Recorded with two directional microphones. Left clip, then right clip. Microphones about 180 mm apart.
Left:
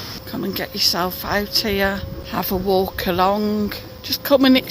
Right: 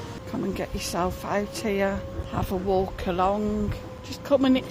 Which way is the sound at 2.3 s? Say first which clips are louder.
Left 6 dB; 30° left (ahead or behind).